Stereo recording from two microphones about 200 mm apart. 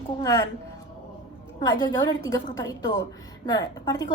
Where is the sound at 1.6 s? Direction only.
20° left (ahead or behind).